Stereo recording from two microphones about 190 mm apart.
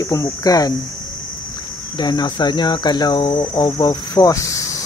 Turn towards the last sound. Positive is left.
turn(degrees=15)  # may be behind; listen again after turning